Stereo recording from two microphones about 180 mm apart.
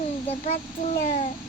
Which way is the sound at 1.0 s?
45° left (ahead or behind).